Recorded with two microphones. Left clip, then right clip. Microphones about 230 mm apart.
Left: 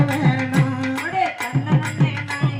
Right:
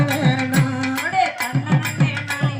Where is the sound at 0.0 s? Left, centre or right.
Right.